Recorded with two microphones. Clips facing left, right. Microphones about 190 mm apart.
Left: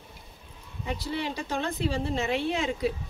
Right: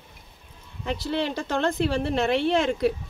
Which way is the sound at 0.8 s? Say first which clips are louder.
Right 5 dB; 80° right.